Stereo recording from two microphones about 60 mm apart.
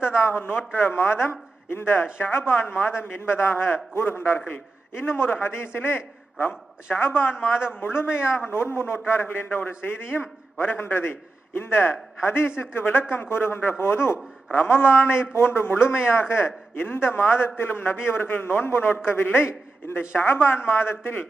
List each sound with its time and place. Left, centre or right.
0.0 s a man's voice: left